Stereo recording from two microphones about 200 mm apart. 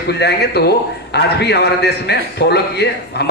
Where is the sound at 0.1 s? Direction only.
55° left (ahead or behind).